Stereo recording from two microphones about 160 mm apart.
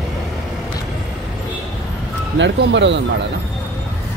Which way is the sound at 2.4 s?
90° right.